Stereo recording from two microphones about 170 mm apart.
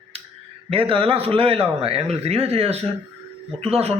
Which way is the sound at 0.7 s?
35° right (ahead or behind).